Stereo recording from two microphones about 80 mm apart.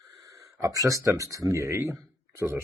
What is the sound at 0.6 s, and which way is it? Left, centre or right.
Speech, right.